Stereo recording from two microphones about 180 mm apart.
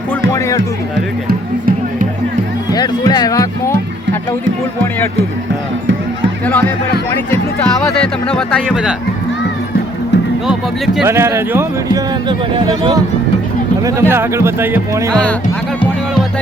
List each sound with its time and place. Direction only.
0.1 s music: 15° left (ahead or behind)
2.7 s speech: 20° left (ahead or behind)
6.4 s speech: 10° left (ahead or behind)
10.4 s speech: 5° right (ahead or behind)
11.1 s a man's voice: 15° right (ahead or behind)
13.8 s a man's voice: 15° right (ahead or behind)
15.1 s speech: 5° left (ahead or behind)